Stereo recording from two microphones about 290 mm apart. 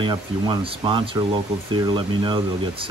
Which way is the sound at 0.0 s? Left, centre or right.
Centre.